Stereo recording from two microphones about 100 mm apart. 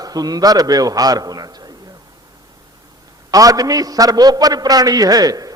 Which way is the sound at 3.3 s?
35° right (ahead or behind).